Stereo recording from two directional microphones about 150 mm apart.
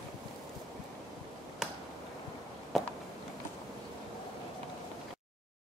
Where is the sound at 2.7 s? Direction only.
Centre (ahead or behind).